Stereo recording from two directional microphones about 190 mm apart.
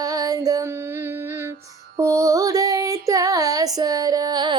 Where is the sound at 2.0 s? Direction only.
15° right (ahead or behind).